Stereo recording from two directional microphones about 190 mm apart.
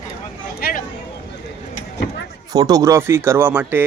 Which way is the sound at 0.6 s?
50° left (ahead or behind).